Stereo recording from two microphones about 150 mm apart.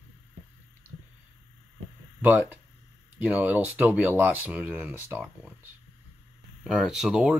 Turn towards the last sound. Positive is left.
turn(degrees=-5)  # may be behind; listen again after turning